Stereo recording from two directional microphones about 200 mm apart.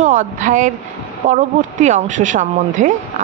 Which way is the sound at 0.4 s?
40° right (ahead or behind).